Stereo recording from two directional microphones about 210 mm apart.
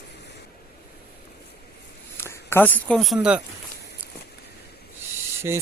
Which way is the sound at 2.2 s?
10° left (ahead or behind).